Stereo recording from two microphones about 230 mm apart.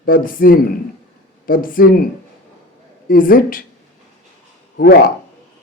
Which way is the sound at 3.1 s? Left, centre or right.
Left.